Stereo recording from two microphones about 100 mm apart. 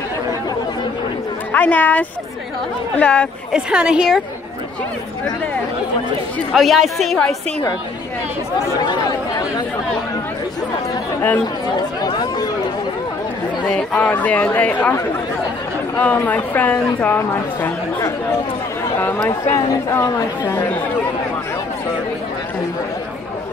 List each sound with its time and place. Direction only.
1.5 s speech: 15° left (ahead or behind)
3.5 s a woman's voice: 10° right (ahead or behind)
6.5 s a woman's voice: centre (ahead or behind)
12.0 s speech: 45° left (ahead or behind)
13.9 s speech: 15° left (ahead or behind)
16.0 s speech: 15° left (ahead or behind)